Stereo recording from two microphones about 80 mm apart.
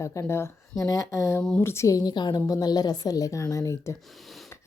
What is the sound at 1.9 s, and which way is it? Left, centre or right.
Speech, left.